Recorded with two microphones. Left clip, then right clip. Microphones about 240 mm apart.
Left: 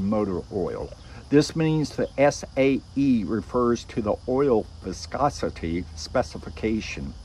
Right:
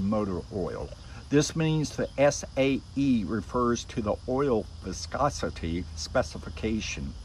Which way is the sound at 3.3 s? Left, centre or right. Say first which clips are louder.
Left 4 dB; left.